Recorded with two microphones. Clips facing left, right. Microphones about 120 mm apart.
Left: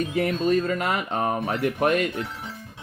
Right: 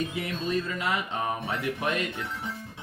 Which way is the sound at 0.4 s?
50° left (ahead or behind).